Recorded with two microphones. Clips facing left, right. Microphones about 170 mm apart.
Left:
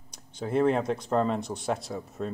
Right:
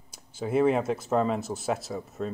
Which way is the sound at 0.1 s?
5° right (ahead or behind).